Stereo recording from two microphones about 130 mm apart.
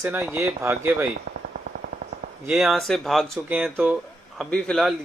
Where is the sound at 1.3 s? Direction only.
90° right.